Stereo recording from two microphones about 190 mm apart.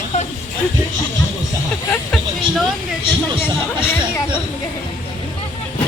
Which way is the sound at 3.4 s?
10° left (ahead or behind).